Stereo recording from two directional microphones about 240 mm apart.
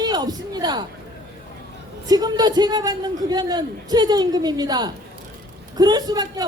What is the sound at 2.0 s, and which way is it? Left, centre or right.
A man's voice, centre.